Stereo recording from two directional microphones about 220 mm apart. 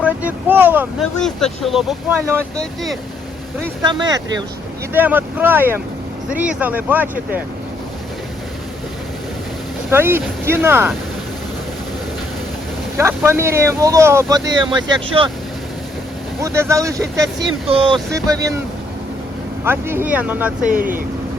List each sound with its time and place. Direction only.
0.0 s speech: 5° right (ahead or behind)
1.2 s speech: centre (ahead or behind)
3.8 s speech: 20° right (ahead or behind)
4.9 s speech: 10° right (ahead or behind)
9.9 s speech: 10° right (ahead or behind)
13.0 s speech: 10° right (ahead or behind)
16.4 s speech: 10° right (ahead or behind)
17.7 s speech: 25° right (ahead or behind)
19.6 s speech: 10° right (ahead or behind)
20.7 s speech: 40° right (ahead or behind)